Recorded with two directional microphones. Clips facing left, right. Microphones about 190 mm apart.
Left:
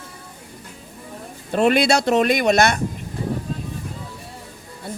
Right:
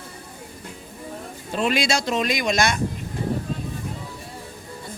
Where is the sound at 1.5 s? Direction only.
60° left (ahead or behind).